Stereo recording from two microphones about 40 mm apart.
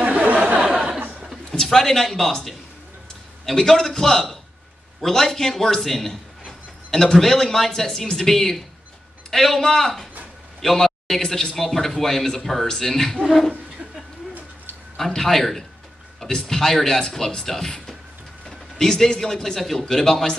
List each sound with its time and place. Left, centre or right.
0.0 s a sound: right
1.5 s a man's voice: centre
15.0 s speech: centre